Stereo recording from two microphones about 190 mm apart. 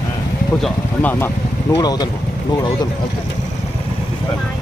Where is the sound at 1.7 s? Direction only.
20° left (ahead or behind).